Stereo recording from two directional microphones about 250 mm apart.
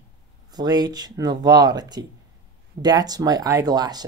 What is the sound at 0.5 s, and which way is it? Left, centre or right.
Speech, centre.